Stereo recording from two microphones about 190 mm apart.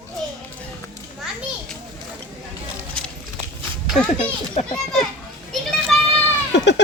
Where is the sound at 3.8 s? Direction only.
Centre (ahead or behind).